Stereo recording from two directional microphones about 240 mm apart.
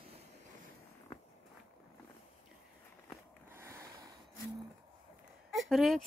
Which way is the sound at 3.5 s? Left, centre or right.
Centre.